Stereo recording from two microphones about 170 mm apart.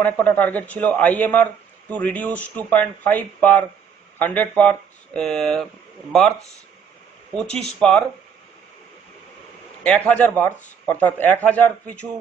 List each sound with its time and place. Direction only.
0.0 s a man's voice: 10° left (ahead or behind)
7.3 s speech: 5° left (ahead or behind)
9.8 s a man's voice: 5° left (ahead or behind)